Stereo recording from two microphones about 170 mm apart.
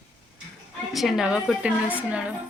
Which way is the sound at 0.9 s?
Centre (ahead or behind).